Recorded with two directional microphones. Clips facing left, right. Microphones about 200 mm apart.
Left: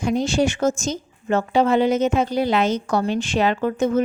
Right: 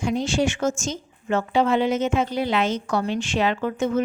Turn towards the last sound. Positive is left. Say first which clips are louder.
# left 3 dB
turn(degrees=40)  # may be behind; listen again after turning